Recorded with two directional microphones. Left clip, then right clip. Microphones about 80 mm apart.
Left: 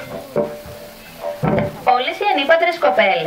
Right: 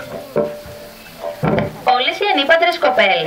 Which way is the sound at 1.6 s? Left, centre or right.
Right.